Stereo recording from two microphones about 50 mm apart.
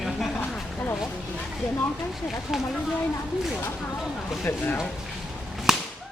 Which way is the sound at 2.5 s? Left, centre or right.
Centre.